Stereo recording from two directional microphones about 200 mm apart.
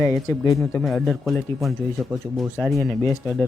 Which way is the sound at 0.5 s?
Centre (ahead or behind).